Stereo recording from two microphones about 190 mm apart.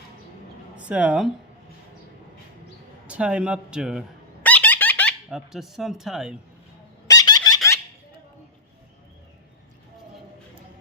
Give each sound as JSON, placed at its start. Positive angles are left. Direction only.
{"t": 0.8, "sound": "speech", "side_deg": -5}
{"t": 3.1, "sound": "speech", "side_deg": -5}
{"t": 4.4, "sound": "squeak", "side_deg": 10}
{"t": 5.3, "sound": "speech", "side_deg": 0}
{"t": 7.1, "sound": "squeak", "side_deg": 20}